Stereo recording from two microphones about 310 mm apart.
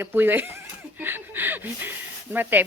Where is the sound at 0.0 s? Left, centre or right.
Centre.